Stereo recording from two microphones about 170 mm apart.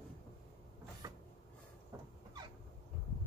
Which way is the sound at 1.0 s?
20° right (ahead or behind).